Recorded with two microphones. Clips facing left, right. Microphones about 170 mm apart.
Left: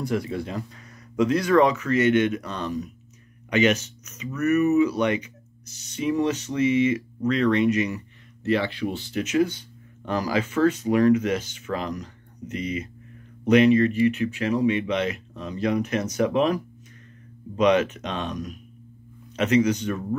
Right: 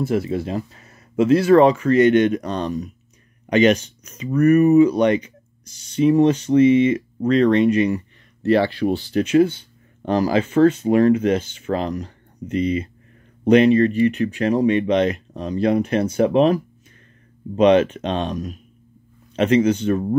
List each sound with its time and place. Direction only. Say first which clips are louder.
0.0 s speech: right 5 dB; 25° right (ahead or behind)